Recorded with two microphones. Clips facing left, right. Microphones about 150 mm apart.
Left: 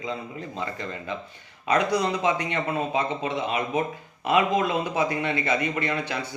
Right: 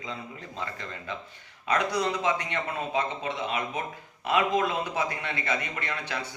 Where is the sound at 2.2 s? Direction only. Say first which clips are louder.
Left 4 dB; 15° left (ahead or behind).